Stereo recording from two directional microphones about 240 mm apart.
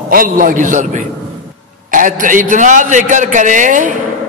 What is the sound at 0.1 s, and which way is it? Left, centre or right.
A man's voice, right.